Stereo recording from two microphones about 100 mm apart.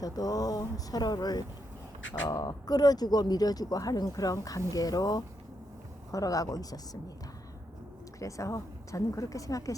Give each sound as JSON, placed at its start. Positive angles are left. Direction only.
{"t": 0.0, "sound": "speech", "side_deg": 40}
{"t": 8.2, "sound": "speech", "side_deg": 30}